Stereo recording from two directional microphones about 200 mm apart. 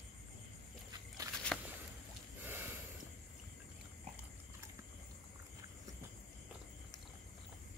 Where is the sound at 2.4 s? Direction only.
10° right (ahead or behind).